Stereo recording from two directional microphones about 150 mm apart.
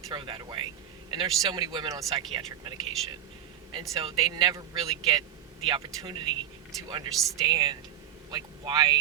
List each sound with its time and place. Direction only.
0.1 s a man's voice: 35° right (ahead or behind)